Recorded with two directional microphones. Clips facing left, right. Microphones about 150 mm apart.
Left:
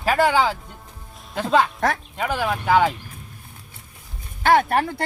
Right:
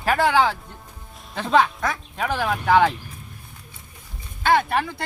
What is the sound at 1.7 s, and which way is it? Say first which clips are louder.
Speech: left 4 dB; 70° left (ahead or behind).